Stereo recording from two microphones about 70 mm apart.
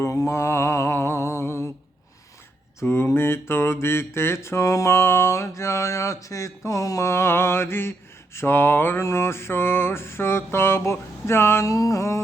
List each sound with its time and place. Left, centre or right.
0.3 s mantra: left
2.8 s mantra: left